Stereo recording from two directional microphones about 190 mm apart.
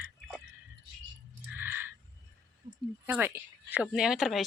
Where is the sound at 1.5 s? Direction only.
10° right (ahead or behind).